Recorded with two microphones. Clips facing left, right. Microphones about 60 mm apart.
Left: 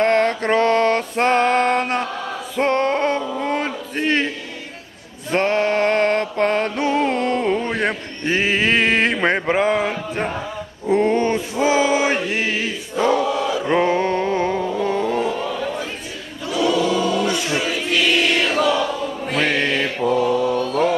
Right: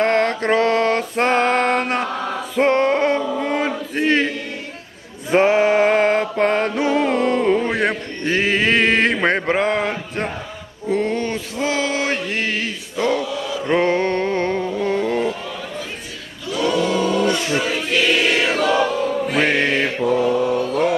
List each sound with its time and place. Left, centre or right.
0.0 s music: centre
3.9 s a sound: centre
5.3 s music: centre
10.9 s a sound: left
11.5 s chant: centre
13.7 s a sound: centre
16.6 s choir: right
17.9 s choir: centre
19.3 s music: centre
19.5 s mantra: right
20.5 s mantra: centre